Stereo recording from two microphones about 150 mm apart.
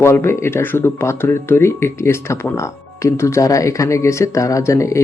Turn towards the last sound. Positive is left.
turn(degrees=20)  # may be behind; listen again after turning